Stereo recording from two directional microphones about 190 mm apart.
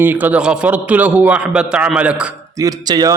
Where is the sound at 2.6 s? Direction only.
20° right (ahead or behind).